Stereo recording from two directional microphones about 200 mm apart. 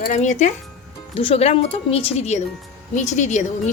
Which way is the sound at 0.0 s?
35° left (ahead or behind).